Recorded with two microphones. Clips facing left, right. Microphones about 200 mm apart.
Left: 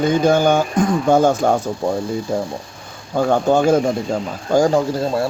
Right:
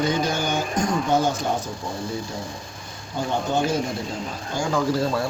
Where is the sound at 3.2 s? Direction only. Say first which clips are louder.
Left 8 dB; 50° left (ahead or behind).